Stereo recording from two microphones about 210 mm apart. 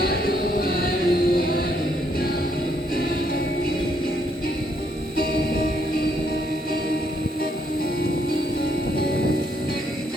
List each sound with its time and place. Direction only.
0.0 s music: 50° left (ahead or behind)